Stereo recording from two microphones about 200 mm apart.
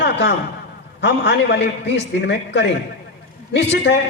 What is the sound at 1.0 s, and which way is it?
A man's voice, 60° left (ahead or behind).